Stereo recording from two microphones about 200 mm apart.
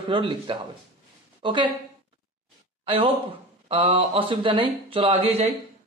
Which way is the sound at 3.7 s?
30° right (ahead or behind).